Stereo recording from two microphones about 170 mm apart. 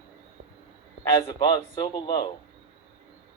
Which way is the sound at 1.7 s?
25° left (ahead or behind).